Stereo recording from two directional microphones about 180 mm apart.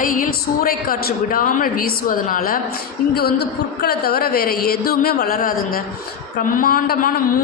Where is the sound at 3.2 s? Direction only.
60° left (ahead or behind).